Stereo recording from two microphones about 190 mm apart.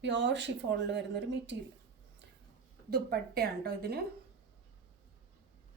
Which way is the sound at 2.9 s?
55° right (ahead or behind).